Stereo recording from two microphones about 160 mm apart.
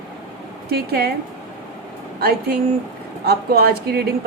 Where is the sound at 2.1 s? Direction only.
75° right (ahead or behind).